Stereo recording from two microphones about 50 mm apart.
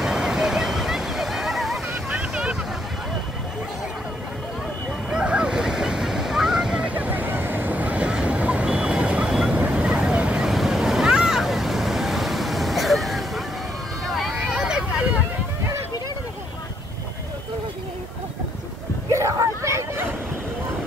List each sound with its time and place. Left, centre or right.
0.0 s waves: centre
2.0 s boat: centre
5.1 s waves: centre
6.8 s vehicle: right
9.5 s waves: right
10.4 s vehicle: centre
14.4 s vehicle: centre
19.1 s a sound: right